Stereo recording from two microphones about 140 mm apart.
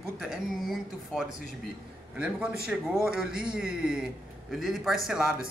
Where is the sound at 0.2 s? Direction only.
Centre (ahead or behind).